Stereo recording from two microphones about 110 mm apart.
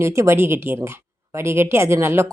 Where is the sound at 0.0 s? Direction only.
25° right (ahead or behind).